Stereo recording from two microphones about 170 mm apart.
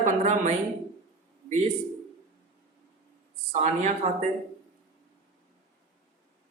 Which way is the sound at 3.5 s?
40° right (ahead or behind).